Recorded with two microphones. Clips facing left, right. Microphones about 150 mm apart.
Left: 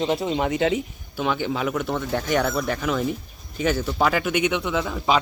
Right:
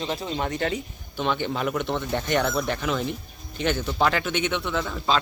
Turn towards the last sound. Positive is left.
turn(degrees=10)  # may be behind; listen again after turning